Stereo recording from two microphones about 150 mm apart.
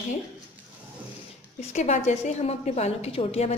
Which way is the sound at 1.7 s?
50° left (ahead or behind).